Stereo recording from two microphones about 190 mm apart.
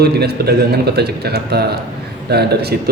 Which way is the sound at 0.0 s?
55° right (ahead or behind).